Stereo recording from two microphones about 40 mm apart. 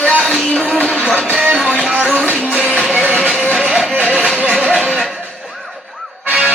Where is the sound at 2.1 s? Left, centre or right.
Right.